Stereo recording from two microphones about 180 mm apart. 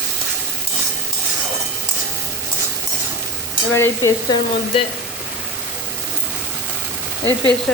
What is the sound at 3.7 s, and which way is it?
Frying, 15° left (ahead or behind).